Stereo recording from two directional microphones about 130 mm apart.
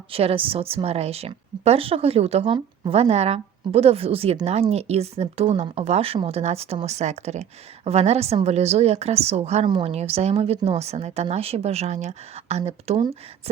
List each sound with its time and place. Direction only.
0.1 s a woman's voice: 45° right (ahead or behind)
9.6 s a woman's voice: 45° right (ahead or behind)